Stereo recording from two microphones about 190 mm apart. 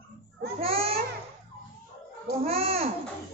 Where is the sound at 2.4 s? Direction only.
30° right (ahead or behind).